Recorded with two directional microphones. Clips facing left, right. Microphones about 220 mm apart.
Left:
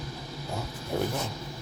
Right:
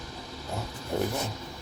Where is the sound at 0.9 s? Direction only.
5° left (ahead or behind).